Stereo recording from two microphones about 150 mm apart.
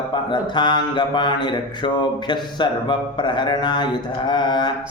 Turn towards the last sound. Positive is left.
turn(degrees=30)  # may be behind; listen again after turning